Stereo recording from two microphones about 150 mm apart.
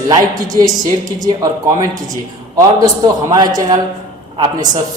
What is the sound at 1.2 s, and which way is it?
Speech, 25° right (ahead or behind).